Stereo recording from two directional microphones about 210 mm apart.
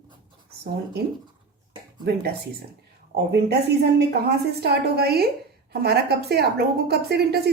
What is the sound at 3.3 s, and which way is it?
A woman's voice, 50° right (ahead or behind).